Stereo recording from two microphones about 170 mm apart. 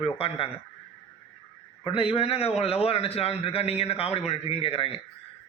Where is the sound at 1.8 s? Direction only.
35° left (ahead or behind).